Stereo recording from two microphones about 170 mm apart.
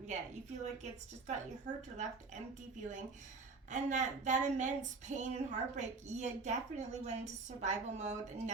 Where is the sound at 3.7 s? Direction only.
45° right (ahead or behind).